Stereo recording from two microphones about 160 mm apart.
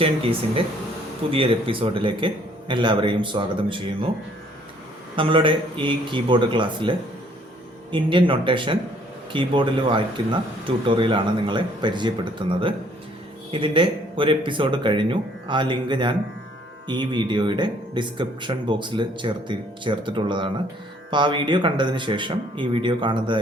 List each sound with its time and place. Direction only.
0.0 s speech: 35° right (ahead or behind)
5.1 s speech: 30° right (ahead or behind)